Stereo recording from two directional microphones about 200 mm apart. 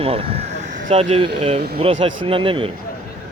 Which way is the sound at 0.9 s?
30° right (ahead or behind).